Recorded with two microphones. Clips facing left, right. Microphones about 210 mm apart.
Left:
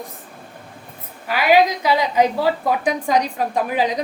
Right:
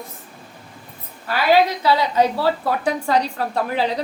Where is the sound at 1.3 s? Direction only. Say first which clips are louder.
Left 1 dB; 15° left (ahead or behind).